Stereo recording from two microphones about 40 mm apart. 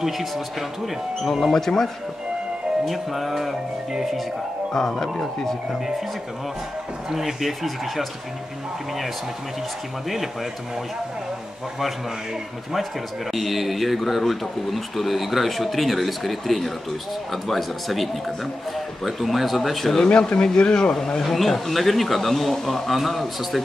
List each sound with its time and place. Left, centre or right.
0.0 s a man's voice: centre
1.5 s speech: centre
2.8 s a man's voice: centre
4.7 s speech: centre
7.1 s a man's voice: centre
10.0 s a man's voice: centre
13.3 s a man's voice: centre
20.1 s speech: left
20.9 s a man's voice: centre